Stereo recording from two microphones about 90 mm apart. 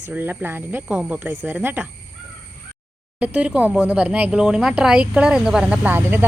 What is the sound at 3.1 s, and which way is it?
Speech, 15° right (ahead or behind).